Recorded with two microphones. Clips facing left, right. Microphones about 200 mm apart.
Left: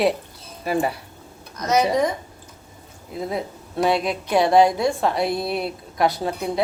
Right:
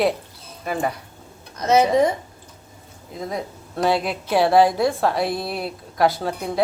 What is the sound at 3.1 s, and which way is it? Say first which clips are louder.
Speech: left 2 dB; 5° left (ahead or behind).